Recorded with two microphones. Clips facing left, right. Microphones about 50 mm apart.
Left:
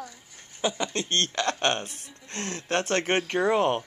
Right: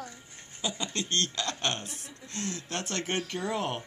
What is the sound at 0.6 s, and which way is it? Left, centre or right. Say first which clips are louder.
Speech: left 6 dB; left.